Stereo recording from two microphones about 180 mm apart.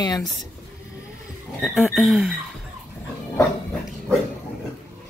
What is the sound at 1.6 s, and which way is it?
Speech, centre (ahead or behind).